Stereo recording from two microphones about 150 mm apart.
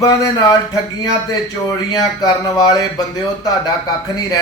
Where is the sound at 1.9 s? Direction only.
25° left (ahead or behind).